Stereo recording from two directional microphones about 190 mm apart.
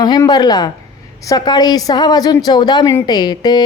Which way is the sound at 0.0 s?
20° left (ahead or behind).